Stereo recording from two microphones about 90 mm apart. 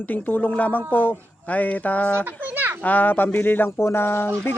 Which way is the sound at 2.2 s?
20° right (ahead or behind).